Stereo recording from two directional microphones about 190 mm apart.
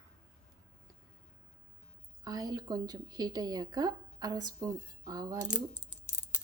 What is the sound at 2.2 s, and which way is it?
A woman's voice, 20° right (ahead or behind).